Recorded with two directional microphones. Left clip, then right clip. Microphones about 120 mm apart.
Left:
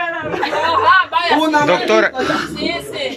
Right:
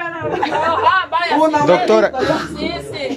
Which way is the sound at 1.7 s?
35° right (ahead or behind).